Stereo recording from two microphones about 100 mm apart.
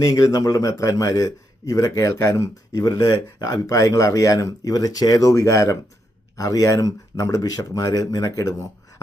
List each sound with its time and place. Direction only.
0.0 s a man's voice: 35° left (ahead or behind)